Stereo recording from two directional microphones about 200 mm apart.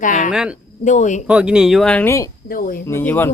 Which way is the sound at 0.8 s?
35° left (ahead or behind).